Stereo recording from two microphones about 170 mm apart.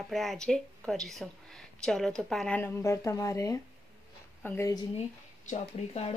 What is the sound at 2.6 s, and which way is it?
Speech, 15° left (ahead or behind).